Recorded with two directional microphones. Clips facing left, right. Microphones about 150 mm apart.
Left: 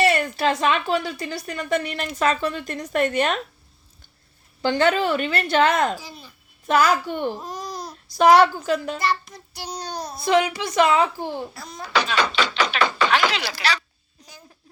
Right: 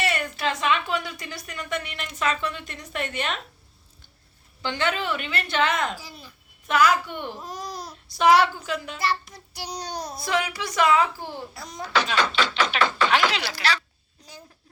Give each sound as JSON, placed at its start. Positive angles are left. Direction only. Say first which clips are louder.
{"t": 0.0, "sound": "speech", "louder": "left 7 dB", "side_deg": 35}
{"t": 4.6, "sound": "speech", "louder": "left 7 dB", "side_deg": 40}
{"t": 7.4, "sound": "babbling", "louder": "left 2 dB", "side_deg": -5}
{"t": 7.9, "sound": "child singing", "louder": "left 3 dB", "side_deg": 40}
{"t": 9.0, "sound": "child singing", "louder": "left 2 dB", "side_deg": -5}
{"t": 10.2, "sound": "speech", "louder": "left 8 dB", "side_deg": 25}
{"t": 11.5, "sound": "child singing", "louder": "left 1 dB", "side_deg": -20}
{"t": 11.8, "sound": "babbling", "louder": "left 1 dB", "side_deg": 0}
{"t": 12.4, "sound": "tap", "louder": "left 1 dB", "side_deg": 0}
{"t": 12.8, "sound": "a sound", "louder": "left 2 dB", "side_deg": 0}
{"t": 13.3, "sound": "speech", "louder": "left 2 dB", "side_deg": 90}
{"t": 13.6, "sound": "babbling", "louder": "left 1 dB", "side_deg": 0}